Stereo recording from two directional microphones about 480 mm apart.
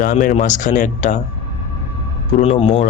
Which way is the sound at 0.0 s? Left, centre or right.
Centre.